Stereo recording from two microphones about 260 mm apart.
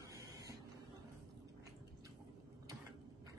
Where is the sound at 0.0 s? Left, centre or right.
Centre.